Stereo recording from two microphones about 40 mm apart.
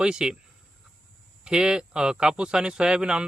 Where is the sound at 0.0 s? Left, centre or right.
Centre.